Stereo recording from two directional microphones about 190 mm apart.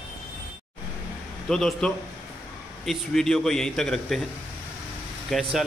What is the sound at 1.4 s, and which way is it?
Speech, 5° left (ahead or behind).